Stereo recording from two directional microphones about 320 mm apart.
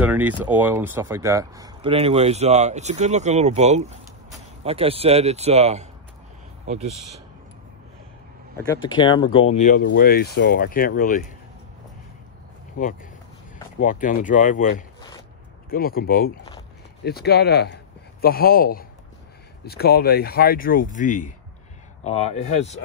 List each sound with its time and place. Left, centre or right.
0.0 s speech: centre
8.6 s speech: centre
12.7 s speech: left
15.0 s zipper: centre
15.7 s speech: left